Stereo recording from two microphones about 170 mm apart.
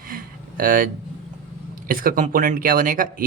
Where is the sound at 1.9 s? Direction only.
55° right (ahead or behind).